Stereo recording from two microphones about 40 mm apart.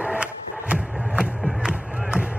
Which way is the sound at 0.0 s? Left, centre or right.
Right.